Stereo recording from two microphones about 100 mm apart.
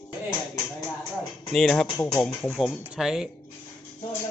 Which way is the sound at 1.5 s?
5° left (ahead or behind).